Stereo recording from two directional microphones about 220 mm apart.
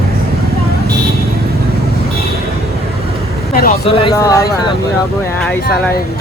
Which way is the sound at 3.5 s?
40° left (ahead or behind).